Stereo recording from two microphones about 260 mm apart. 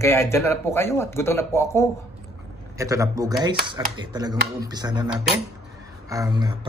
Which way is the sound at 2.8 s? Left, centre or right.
Centre.